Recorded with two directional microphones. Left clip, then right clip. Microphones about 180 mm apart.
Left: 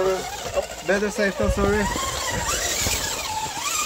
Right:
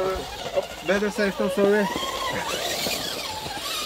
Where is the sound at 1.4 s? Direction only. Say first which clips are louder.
Right 5 dB; 10° right (ahead or behind).